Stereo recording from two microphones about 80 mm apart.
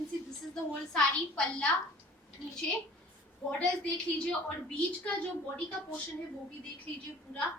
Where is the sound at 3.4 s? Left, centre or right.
Centre.